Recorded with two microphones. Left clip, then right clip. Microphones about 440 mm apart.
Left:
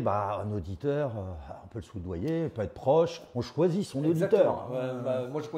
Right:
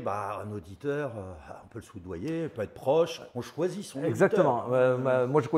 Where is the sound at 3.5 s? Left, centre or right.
Left.